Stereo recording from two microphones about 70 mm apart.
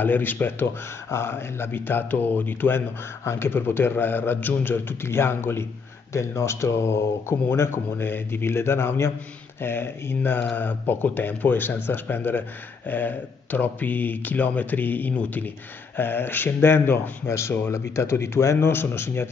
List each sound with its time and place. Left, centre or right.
0.0 s speech: left